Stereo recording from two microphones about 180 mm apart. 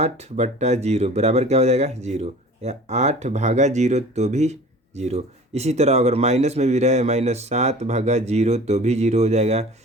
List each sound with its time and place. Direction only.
0.0 s speech: 40° right (ahead or behind)